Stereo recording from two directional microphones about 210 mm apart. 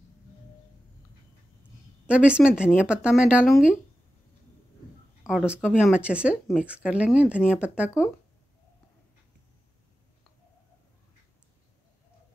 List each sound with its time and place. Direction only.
2.0 s speech: 5° right (ahead or behind)
5.2 s speech: 5° right (ahead or behind)